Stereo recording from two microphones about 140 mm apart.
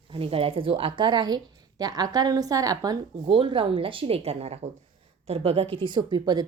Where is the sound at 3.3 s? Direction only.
40° right (ahead or behind).